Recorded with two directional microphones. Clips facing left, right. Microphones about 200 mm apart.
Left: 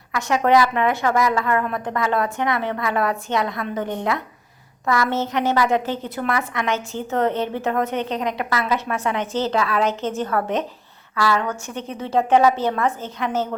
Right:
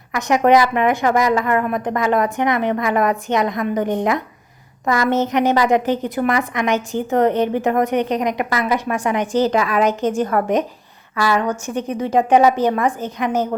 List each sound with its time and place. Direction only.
0.1 s a woman's voice: 20° right (ahead or behind)